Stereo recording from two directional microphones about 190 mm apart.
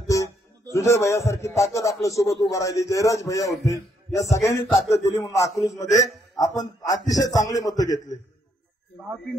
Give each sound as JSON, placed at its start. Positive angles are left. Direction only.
{"t": 0.0, "sound": "a man's voice", "side_deg": 15}